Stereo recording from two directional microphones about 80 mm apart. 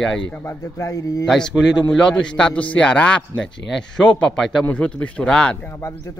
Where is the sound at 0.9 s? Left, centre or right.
Left.